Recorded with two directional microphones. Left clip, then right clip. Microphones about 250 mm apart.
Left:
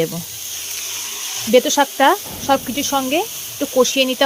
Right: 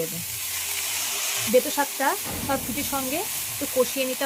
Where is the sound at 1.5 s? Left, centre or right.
Left.